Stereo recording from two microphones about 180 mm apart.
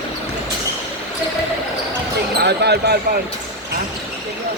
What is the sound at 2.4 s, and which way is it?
Speech, 65° right (ahead or behind).